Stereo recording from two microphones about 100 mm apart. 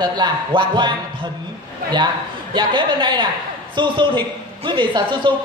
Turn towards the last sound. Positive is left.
turn(degrees=-55)  # may be behind; listen again after turning